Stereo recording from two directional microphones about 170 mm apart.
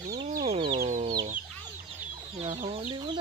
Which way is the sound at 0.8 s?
50° right (ahead or behind).